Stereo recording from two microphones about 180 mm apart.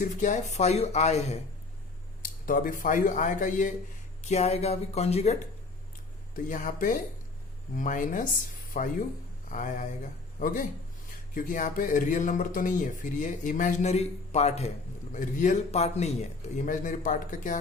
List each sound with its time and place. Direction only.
0.0 s speech: 45° left (ahead or behind)
2.2 s speech: 50° left (ahead or behind)
6.3 s speech: 50° left (ahead or behind)